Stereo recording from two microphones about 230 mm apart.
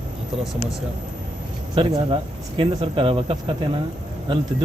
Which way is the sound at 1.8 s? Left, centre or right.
Right.